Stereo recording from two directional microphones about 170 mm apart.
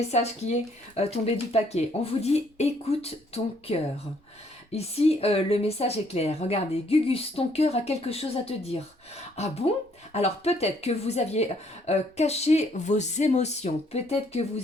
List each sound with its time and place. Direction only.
0.1 s speech: 40° left (ahead or behind)